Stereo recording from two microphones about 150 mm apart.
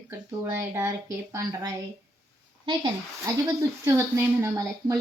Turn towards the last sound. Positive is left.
turn(degrees=-20)  # may be behind; listen again after turning